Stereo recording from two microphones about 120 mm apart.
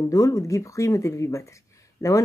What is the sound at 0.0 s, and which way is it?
Speech, 25° left (ahead or behind).